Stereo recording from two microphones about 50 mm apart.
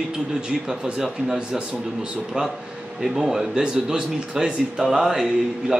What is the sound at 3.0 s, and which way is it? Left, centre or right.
Speech, centre.